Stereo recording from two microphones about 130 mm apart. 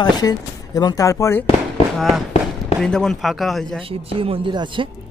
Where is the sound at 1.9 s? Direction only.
Centre (ahead or behind).